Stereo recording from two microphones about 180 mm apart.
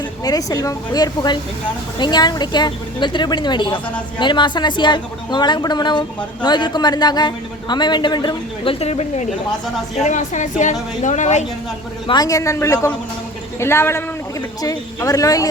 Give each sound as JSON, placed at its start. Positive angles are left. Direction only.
{"t": 0.3, "sound": "a woman's voice", "side_deg": 20}
{"t": 12.0, "sound": "a man's voice", "side_deg": 20}